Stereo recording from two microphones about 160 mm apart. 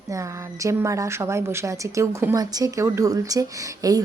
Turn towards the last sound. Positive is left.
turn(degrees=-20)  # may be behind; listen again after turning